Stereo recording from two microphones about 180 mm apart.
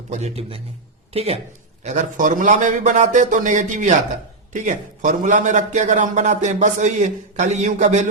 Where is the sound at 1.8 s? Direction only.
45° right (ahead or behind).